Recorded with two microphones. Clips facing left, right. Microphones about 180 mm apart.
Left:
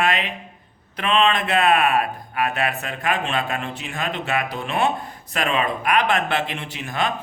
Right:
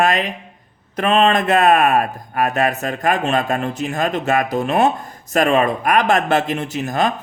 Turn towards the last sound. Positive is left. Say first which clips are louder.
# right 6 dB
turn(degrees=-40)  # may be behind; listen again after turning